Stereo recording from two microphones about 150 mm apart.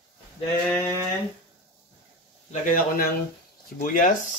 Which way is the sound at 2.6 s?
65° left (ahead or behind).